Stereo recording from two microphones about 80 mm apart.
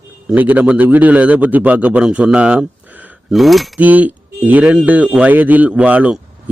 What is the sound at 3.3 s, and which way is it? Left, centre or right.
Speech, centre.